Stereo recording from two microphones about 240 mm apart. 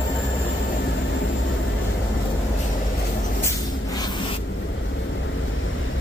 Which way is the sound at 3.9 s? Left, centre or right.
Centre.